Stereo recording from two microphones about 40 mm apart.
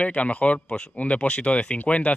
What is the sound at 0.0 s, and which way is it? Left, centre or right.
Speech, left.